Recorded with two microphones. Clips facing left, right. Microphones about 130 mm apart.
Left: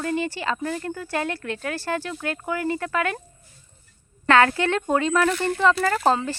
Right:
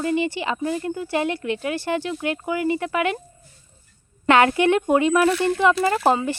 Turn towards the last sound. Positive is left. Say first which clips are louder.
# right 2 dB
turn(degrees=-10)  # may be behind; listen again after turning